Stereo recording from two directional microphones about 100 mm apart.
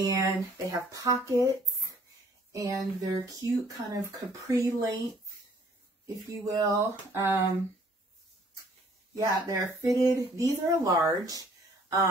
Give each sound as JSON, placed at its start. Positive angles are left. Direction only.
{"t": 0.0, "sound": "speech", "side_deg": -35}
{"t": 6.4, "sound": "speech", "side_deg": -35}
{"t": 9.1, "sound": "speech", "side_deg": -35}